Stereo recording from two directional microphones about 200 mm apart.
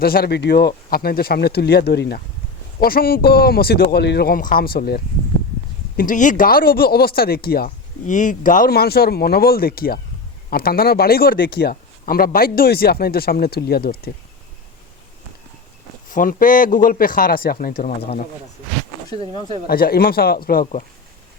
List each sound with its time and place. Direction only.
0.0 s speech: 50° left (ahead or behind)
16.0 s speech: 40° left (ahead or behind)
19.6 s speech: 50° left (ahead or behind)